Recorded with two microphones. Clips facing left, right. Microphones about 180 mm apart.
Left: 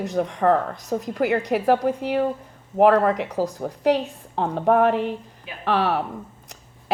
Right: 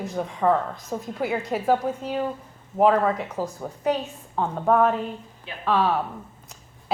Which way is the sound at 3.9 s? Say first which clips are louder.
Left 4 dB; 70° left (ahead or behind).